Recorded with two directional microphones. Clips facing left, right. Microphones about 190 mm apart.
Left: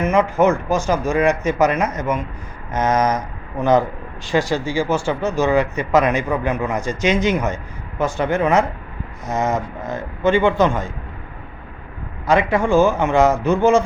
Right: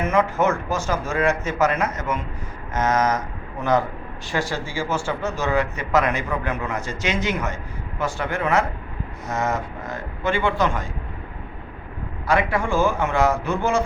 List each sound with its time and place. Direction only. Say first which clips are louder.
0.1 s a man's voice: left 5 dB; 20° left (ahead or behind)
12.2 s a man's voice: left 5 dB; 20° left (ahead or behind)